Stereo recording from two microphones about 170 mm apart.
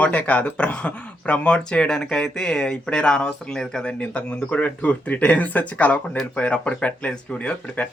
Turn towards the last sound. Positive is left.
turn(degrees=5)  # may be behind; listen again after turning